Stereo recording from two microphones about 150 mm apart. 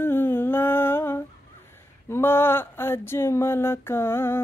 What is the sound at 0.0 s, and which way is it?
Humming, 15° left (ahead or behind).